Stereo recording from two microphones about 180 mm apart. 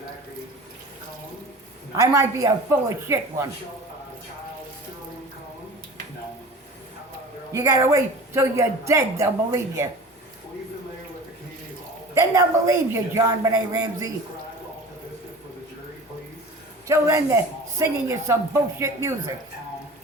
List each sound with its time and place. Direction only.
2.0 s speech: 15° right (ahead or behind)
7.5 s speech: 20° right (ahead or behind)
12.1 s speech: 15° right (ahead or behind)
16.8 s speech: 15° right (ahead or behind)